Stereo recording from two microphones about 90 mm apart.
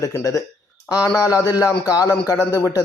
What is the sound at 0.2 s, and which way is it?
A man's voice, 40° left (ahead or behind).